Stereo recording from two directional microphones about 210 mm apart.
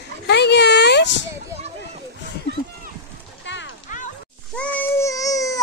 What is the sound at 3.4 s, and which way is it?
Music, 60° left (ahead or behind).